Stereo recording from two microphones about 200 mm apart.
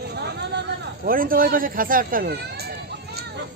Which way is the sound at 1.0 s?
45° right (ahead or behind).